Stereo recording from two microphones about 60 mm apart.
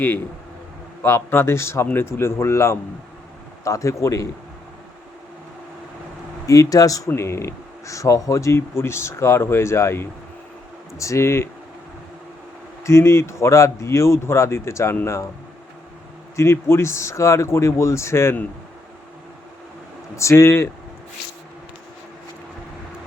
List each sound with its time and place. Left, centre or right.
1.3 s speech: left
3.6 s speech: left
6.4 s speech: left
7.2 s speech: left
8.7 s speech: left
10.9 s speech: left
12.8 s speech: left
16.3 s speech: left
20.1 s speech: left